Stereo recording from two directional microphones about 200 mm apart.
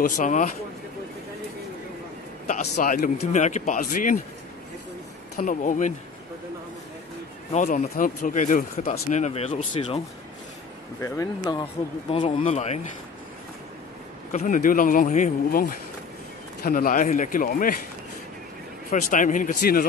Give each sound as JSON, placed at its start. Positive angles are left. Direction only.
{"t": 0.1, "sound": "speech", "side_deg": 40}
{"t": 2.4, "sound": "speech", "side_deg": 35}
{"t": 5.4, "sound": "speech", "side_deg": 40}
{"t": 7.5, "sound": "speech", "side_deg": 40}
{"t": 11.0, "sound": "speech", "side_deg": 15}
{"t": 11.6, "sound": "speech", "side_deg": 30}
{"t": 14.3, "sound": "a man's voice", "side_deg": 40}
{"t": 18.9, "sound": "speech", "side_deg": 40}